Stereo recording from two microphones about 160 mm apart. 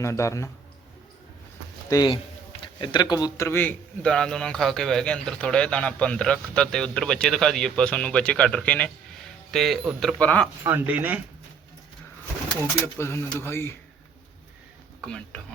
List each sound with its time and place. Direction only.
0.0 s speech: 20° left (ahead or behind)
1.9 s a man's voice: 30° left (ahead or behind); by 10.5 s 10° left (ahead or behind)
10.6 s speech: 10° right (ahead or behind)
12.8 s speech: 15° left (ahead or behind)
15.0 s a man's voice: 5° left (ahead or behind)